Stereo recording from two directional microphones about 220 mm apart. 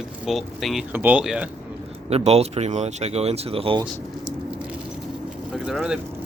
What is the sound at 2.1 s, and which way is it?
Speech, 30° right (ahead or behind).